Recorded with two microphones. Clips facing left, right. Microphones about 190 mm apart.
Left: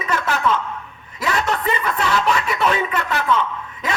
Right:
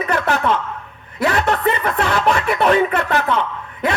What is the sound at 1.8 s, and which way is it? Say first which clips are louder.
Music: right 2 dB; 55° right (ahead or behind).